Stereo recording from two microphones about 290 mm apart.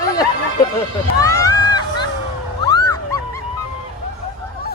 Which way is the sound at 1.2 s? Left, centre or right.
Centre.